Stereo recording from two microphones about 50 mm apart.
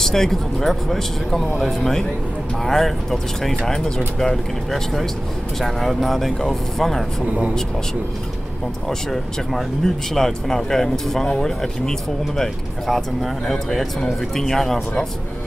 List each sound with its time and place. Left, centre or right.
0.0 s speech: centre
8.8 s speech: centre